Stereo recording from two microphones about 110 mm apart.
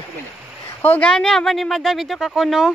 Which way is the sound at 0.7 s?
15° left (ahead or behind).